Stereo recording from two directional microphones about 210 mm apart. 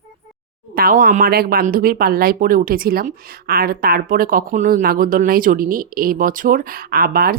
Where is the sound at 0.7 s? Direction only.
40° right (ahead or behind).